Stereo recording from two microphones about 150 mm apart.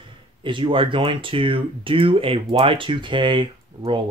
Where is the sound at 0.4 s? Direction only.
35° right (ahead or behind).